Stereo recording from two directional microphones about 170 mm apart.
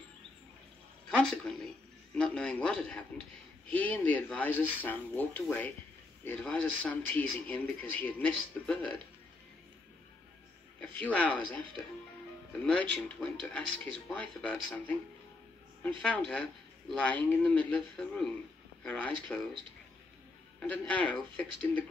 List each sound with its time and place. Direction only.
1.0 s a man's voice: 5° left (ahead or behind)
11.1 s speech: 10° left (ahead or behind)
12.6 s speech: 5° left (ahead or behind)
16.0 s a man's voice: 5° left (ahead or behind)
20.7 s speech: 10° left (ahead or behind)